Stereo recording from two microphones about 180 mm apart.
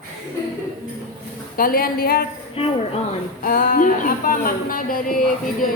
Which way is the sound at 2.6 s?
30° left (ahead or behind).